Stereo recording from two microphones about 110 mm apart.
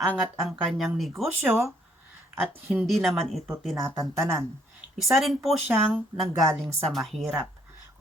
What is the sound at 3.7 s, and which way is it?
Speech, 30° right (ahead or behind).